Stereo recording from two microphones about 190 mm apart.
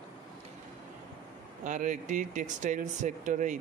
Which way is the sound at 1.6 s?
40° right (ahead or behind).